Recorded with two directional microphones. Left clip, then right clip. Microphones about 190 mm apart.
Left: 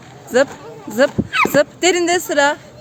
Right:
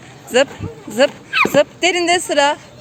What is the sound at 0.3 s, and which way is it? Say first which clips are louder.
Speech: even; 10° left (ahead or behind).